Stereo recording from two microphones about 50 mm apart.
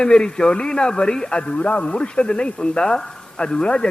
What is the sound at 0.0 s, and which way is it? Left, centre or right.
A man's voice, centre.